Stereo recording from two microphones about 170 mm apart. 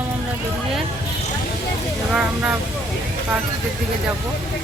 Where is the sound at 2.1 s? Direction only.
5° right (ahead or behind).